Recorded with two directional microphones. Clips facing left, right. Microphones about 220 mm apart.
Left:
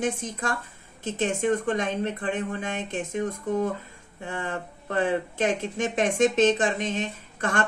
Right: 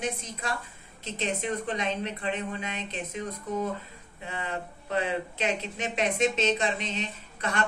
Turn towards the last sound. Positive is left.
turn(degrees=50)  # may be behind; listen again after turning